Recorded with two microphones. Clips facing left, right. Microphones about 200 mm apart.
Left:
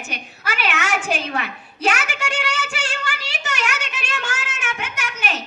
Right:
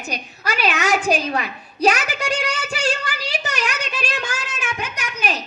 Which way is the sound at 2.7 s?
35° right (ahead or behind).